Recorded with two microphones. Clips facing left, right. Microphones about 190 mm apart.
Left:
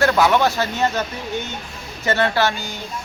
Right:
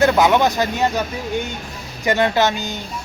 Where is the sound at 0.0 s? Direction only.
20° right (ahead or behind).